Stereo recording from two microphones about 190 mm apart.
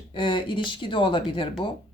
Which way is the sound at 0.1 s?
25° left (ahead or behind).